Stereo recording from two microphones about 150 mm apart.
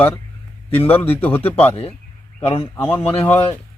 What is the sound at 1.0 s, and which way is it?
Speech, 10° left (ahead or behind).